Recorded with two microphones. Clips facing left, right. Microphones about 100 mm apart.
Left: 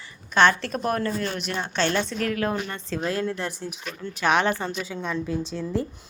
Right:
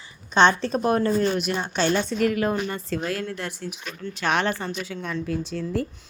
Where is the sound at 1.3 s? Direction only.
10° right (ahead or behind).